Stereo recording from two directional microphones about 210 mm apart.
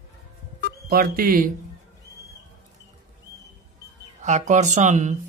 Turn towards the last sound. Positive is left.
turn(degrees=-35)  # may be behind; listen again after turning